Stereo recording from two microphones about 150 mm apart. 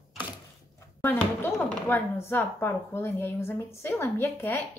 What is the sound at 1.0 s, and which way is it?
A woman's voice, 15° left (ahead or behind).